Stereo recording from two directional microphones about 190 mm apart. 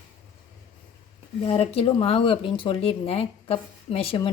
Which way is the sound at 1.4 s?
30° left (ahead or behind).